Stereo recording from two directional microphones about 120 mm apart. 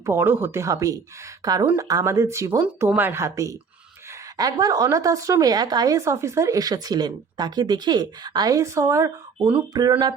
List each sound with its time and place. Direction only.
0.0 s a woman's voice: 20° right (ahead or behind)